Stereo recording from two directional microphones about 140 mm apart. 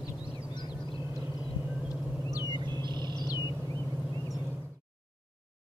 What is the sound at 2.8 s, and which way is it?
Music, 30° right (ahead or behind).